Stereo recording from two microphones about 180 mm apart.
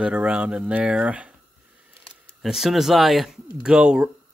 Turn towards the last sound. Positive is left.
turn(degrees=-5)  # may be behind; listen again after turning